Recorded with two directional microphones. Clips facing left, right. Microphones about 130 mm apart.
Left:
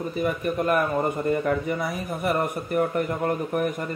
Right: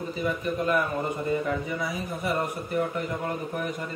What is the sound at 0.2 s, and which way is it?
A man's voice, 55° left (ahead or behind).